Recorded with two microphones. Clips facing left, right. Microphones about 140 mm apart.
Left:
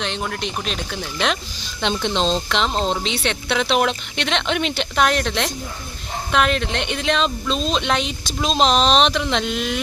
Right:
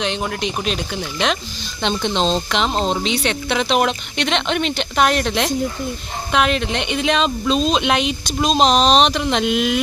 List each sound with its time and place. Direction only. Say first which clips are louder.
0.0 s speech: right 3 dB; 5° right (ahead or behind)